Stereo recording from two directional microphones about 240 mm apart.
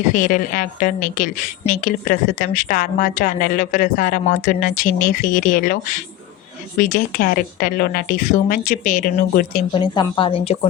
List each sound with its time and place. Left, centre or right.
0.0 s a woman's voice: left
9.7 s a woman's voice: centre